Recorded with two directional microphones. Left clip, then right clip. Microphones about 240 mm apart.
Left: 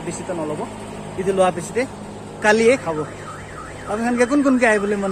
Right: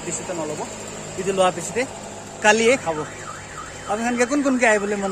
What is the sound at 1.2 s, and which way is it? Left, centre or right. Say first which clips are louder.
Speech: left 2 dB; centre.